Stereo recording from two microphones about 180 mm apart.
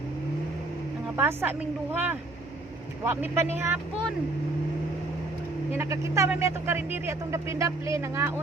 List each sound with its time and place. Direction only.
1.1 s speech: 10° right (ahead or behind)
5.7 s speech: 15° right (ahead or behind)